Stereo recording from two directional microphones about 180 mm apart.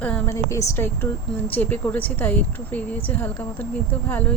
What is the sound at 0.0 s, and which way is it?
Speech, 10° left (ahead or behind).